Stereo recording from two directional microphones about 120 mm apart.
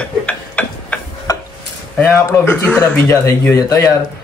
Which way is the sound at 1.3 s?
30° left (ahead or behind).